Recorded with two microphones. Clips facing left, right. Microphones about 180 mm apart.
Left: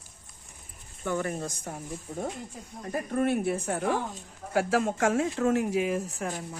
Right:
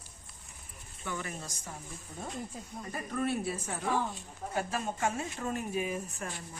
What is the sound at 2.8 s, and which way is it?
Speech, 50° left (ahead or behind).